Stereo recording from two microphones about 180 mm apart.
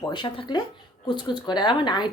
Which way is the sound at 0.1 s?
25° left (ahead or behind).